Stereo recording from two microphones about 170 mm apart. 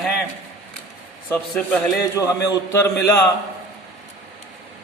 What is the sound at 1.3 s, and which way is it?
Speech, 5° left (ahead or behind).